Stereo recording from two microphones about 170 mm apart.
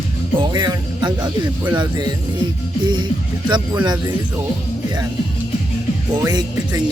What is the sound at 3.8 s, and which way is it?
Speech, 25° right (ahead or behind).